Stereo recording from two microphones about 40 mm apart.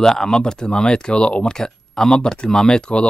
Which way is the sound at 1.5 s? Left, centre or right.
Centre.